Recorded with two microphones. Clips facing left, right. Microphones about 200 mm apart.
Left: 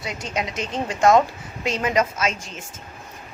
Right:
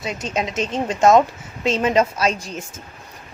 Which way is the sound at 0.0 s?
25° right (ahead or behind).